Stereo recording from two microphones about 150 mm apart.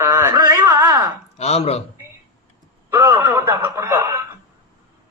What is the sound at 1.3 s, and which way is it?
Speech, 45° left (ahead or behind).